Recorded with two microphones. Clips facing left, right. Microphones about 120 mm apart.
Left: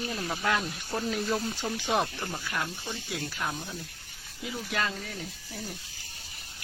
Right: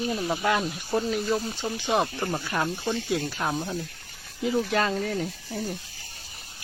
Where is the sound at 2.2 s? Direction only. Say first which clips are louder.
Right 6 dB; 40° right (ahead or behind).